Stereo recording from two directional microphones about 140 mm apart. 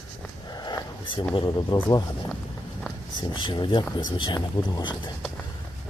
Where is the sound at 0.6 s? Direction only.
30° left (ahead or behind).